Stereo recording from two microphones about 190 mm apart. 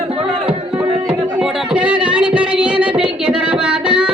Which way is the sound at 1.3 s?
5° right (ahead or behind).